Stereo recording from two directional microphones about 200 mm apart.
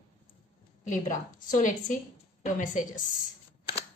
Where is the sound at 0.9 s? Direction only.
40° left (ahead or behind).